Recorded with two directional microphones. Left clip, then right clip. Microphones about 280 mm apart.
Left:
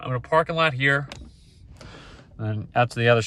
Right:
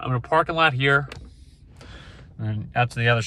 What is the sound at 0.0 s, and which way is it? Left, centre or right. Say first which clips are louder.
Speech: even; centre.